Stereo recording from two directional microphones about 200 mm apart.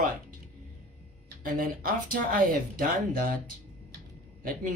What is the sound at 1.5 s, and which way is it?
Speech, 45° right (ahead or behind).